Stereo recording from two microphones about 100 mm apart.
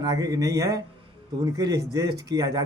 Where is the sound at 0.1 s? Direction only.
40° right (ahead or behind).